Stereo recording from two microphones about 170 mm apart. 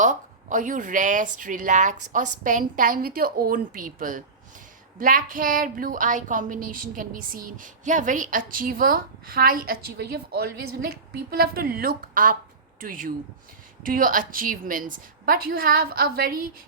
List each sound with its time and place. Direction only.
0.0 s a woman's voice: 50° right (ahead or behind)